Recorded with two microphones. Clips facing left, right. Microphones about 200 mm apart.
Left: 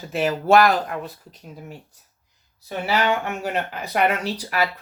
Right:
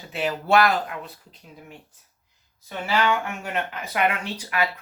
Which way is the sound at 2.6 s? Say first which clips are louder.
Left 2 dB; 35° left (ahead or behind).